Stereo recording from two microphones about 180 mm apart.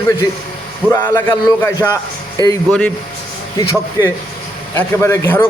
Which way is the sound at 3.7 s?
15° left (ahead or behind).